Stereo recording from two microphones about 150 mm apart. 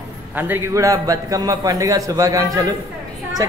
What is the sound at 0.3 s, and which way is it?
A man's voice, 15° right (ahead or behind).